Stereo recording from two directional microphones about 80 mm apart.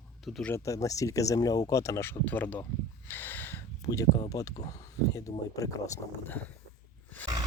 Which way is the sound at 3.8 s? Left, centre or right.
Left.